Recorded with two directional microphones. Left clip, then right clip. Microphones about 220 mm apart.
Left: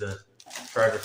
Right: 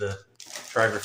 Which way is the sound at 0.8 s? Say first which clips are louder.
Even; 50° right (ahead or behind).